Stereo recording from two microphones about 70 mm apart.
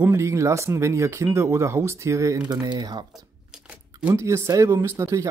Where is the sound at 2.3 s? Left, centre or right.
Right.